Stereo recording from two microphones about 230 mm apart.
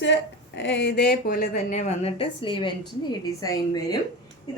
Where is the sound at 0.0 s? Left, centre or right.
Left.